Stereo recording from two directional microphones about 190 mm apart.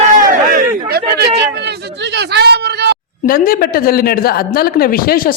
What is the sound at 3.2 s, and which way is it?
Speech, 50° left (ahead or behind).